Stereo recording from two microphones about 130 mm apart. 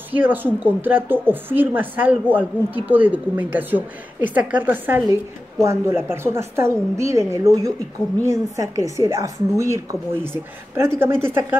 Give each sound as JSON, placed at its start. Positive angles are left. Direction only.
{"t": 0.1, "sound": "a woman's voice", "side_deg": -15}